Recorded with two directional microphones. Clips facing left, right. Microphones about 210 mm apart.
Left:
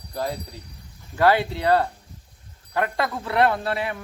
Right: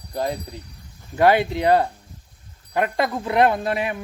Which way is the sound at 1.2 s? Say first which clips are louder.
Right 3 dB; 15° right (ahead or behind).